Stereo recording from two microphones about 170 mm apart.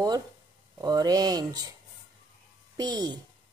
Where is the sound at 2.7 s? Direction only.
25° right (ahead or behind).